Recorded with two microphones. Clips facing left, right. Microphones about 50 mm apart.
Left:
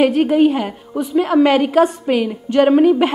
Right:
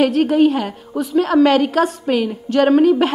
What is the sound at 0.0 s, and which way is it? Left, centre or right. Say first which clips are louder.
Speech: left 1 dB; left.